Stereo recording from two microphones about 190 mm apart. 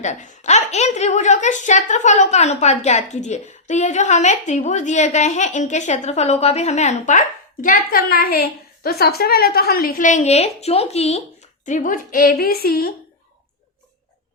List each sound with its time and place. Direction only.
0.0 s a child's voice: 40° left (ahead or behind)